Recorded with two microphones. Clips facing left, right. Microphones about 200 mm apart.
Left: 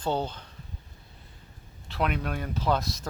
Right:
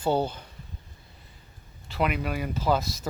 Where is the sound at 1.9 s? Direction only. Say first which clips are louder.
Right 2 dB; centre (ahead or behind).